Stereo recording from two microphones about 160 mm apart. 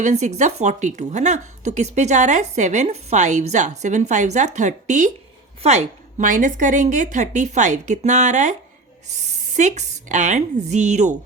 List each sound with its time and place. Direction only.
0.0 s a woman's voice: 45° right (ahead or behind)